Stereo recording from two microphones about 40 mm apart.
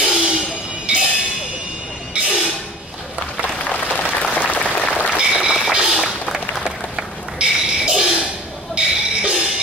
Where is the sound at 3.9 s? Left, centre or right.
Left.